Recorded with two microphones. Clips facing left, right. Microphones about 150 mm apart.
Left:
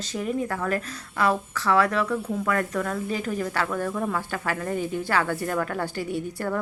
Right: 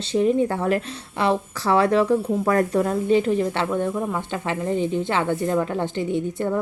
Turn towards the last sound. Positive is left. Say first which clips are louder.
# right 5 dB
turn(degrees=-20)  # may be behind; listen again after turning